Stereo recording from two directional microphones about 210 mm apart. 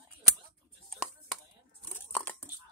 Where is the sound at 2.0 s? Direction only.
10° left (ahead or behind).